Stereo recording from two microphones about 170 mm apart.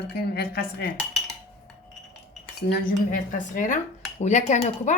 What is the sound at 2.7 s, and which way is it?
Speech, 55° left (ahead or behind).